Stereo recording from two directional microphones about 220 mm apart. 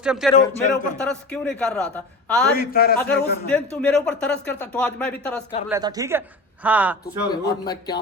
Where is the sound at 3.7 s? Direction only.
5° left (ahead or behind).